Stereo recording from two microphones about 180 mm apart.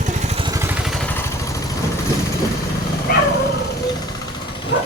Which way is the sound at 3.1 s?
60° left (ahead or behind).